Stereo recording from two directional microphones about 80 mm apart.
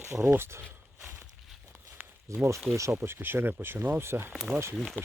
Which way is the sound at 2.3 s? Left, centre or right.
Right.